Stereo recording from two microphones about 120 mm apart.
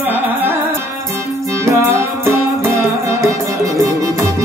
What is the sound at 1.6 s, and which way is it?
Music, 25° right (ahead or behind).